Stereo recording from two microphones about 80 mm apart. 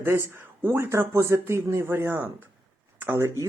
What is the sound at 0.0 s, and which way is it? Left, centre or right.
Speech, right.